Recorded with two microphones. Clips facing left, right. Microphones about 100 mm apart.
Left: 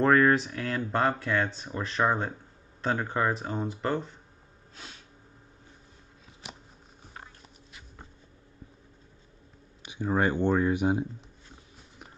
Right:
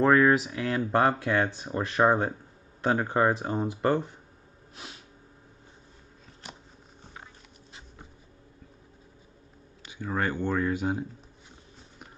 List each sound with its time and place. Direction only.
0.0 s speech: centre (ahead or behind); by 3.1 s 20° right (ahead or behind)
3.1 s speech: 30° right (ahead or behind)
3.4 s speech: 10° right (ahead or behind)
9.8 s speech: 20° left (ahead or behind)